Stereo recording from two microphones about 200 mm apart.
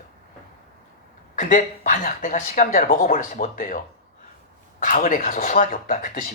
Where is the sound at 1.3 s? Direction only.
40° left (ahead or behind).